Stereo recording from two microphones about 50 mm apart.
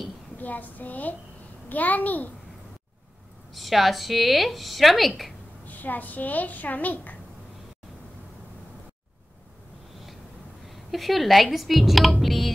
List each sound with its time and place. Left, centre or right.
0.4 s a child's voice: left
3.5 s a woman's voice: centre
5.7 s a child's voice: left
10.7 s a woman's voice: centre